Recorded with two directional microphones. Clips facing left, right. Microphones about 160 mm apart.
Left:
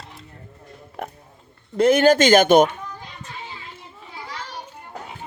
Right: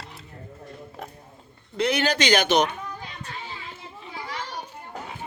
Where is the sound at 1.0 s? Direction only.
65° left (ahead or behind).